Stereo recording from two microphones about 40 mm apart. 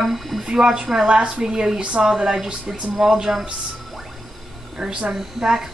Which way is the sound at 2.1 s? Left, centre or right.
Centre.